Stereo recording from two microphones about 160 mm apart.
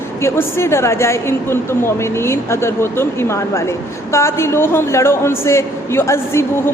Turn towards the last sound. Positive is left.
turn(degrees=15)  # may be behind; listen again after turning